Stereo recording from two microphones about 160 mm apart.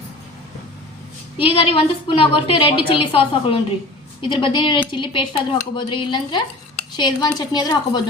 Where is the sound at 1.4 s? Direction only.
35° left (ahead or behind).